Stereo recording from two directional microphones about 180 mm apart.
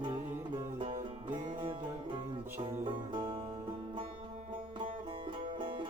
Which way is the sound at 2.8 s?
25° right (ahead or behind).